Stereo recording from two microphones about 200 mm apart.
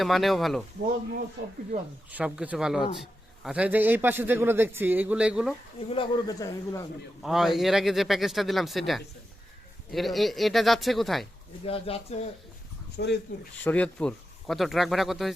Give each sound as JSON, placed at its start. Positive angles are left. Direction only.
{"t": 0.0, "sound": "a man's voice", "side_deg": 0}
{"t": 2.0, "sound": "a man's voice", "side_deg": -5}
{"t": 5.9, "sound": "speech", "side_deg": 20}
{"t": 7.2, "sound": "a man's voice", "side_deg": 0}
{"t": 11.6, "sound": "speech", "side_deg": 30}
{"t": 13.0, "sound": "speech", "side_deg": 60}
{"t": 13.7, "sound": "a man's voice", "side_deg": 5}